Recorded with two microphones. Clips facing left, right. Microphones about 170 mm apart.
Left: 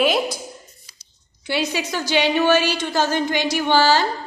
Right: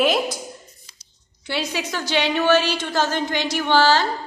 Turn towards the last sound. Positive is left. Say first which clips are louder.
# even
turn(degrees=5)  # may be behind; listen again after turning